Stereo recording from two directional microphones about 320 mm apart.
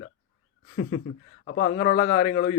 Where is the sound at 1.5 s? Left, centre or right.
Left.